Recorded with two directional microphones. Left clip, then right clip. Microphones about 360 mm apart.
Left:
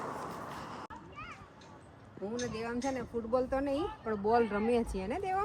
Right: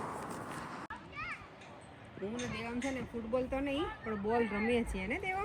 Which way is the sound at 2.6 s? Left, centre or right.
Centre.